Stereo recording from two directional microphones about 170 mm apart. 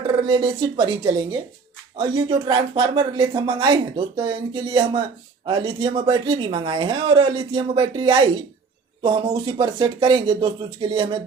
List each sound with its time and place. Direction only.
0.3 s speech: 25° right (ahead or behind)